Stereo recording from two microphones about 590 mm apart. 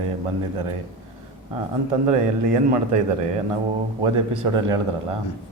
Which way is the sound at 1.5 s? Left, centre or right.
Right.